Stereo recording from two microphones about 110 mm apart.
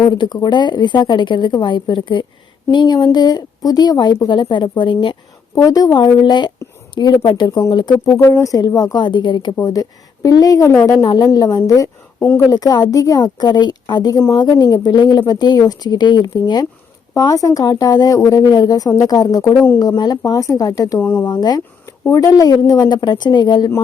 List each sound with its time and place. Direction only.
0.0 s a woman's voice: 40° left (ahead or behind)
5.5 s a woman's voice: 35° left (ahead or behind)
8.1 s a woman's voice: 25° left (ahead or behind); by 9.6 s 45° left (ahead or behind)
10.2 s a woman's voice: 35° left (ahead or behind)
21.0 s speech: 20° left (ahead or behind)
21.2 s a woman's voice: 40° left (ahead or behind)
21.8 s a woman's voice: 30° left (ahead or behind)